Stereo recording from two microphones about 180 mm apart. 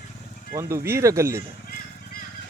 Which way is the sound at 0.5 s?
15° right (ahead or behind).